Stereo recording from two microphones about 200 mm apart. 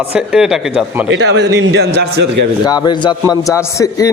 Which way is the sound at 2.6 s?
20° left (ahead or behind).